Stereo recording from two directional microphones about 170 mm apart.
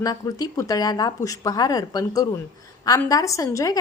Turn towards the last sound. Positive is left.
turn(degrees=20)  # may be behind; listen again after turning